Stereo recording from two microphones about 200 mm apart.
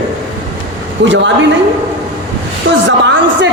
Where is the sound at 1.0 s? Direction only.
65° right (ahead or behind).